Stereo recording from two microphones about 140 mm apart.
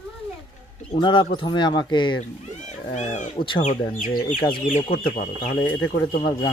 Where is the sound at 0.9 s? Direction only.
35° left (ahead or behind).